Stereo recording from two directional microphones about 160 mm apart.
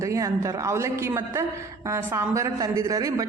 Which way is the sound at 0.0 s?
20° right (ahead or behind).